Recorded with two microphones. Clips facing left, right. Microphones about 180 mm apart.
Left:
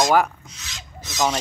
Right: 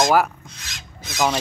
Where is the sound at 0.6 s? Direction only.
60° right (ahead or behind).